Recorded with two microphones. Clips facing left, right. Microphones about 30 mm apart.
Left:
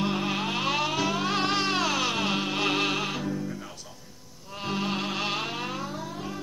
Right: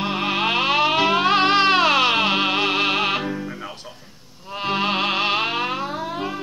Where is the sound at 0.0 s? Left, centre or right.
Right.